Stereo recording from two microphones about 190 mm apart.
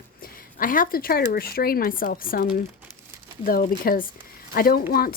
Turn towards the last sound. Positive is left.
turn(degrees=50)  # may be behind; listen again after turning